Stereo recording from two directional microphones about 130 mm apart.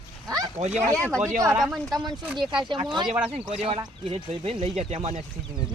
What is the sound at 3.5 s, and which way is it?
Speech, 50° right (ahead or behind).